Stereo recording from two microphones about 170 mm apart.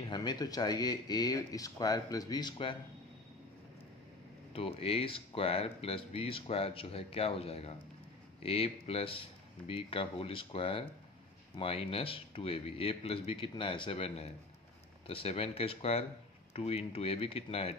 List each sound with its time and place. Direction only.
0.1 s speech: 25° left (ahead or behind)
4.6 s speech: 35° left (ahead or behind)